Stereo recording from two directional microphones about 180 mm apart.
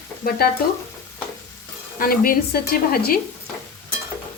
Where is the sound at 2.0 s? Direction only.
50° left (ahead or behind).